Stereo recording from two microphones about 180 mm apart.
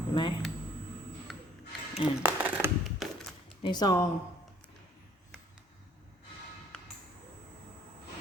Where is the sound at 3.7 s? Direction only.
20° left (ahead or behind).